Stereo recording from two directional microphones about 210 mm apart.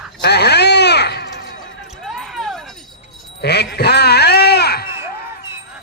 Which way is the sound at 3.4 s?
50° left (ahead or behind).